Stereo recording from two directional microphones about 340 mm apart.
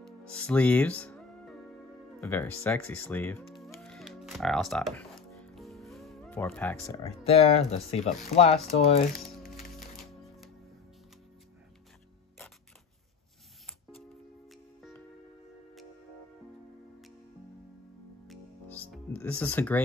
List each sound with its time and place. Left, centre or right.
0.0 s speech: centre
18.2 s music: centre